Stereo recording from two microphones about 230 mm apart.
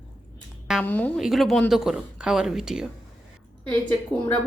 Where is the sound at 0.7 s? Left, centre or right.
Centre.